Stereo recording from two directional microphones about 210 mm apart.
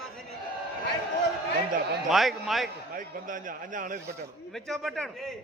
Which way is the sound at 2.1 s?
Centre (ahead or behind).